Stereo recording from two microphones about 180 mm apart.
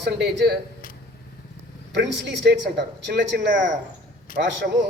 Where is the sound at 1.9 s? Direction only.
75° right (ahead or behind).